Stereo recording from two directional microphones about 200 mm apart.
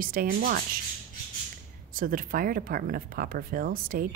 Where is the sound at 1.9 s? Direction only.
45° right (ahead or behind).